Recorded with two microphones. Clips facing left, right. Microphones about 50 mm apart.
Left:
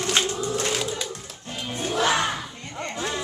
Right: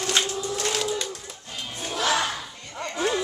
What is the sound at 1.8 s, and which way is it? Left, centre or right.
Music, centre.